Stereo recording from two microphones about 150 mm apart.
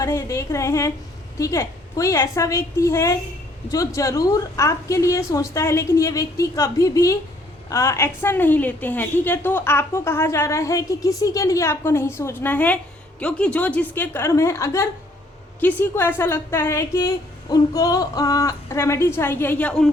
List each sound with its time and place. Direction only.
0.0 s a woman's voice: 20° left (ahead or behind)